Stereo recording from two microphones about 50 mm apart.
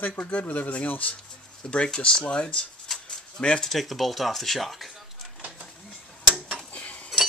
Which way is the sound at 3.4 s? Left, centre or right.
Centre.